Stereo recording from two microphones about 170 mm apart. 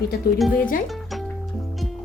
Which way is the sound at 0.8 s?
Centre (ahead or behind).